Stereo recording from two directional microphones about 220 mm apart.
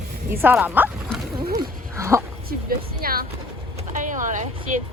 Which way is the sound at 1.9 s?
10° right (ahead or behind).